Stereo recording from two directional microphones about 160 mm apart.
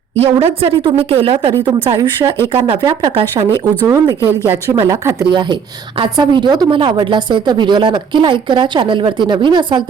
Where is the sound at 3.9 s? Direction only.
15° right (ahead or behind).